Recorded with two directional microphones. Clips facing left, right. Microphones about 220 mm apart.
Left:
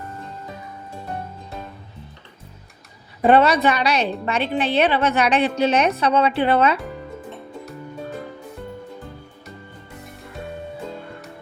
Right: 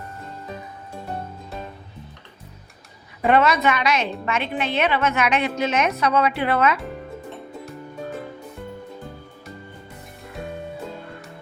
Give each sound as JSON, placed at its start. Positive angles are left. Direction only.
{"t": 3.2, "sound": "a woman's voice", "side_deg": 35}
{"t": 7.3, "sound": "music", "side_deg": 0}